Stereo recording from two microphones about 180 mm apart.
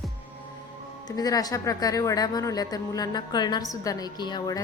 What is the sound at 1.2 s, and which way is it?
Speech, 20° left (ahead or behind).